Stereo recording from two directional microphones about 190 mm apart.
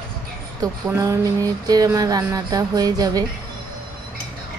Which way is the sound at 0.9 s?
15° right (ahead or behind).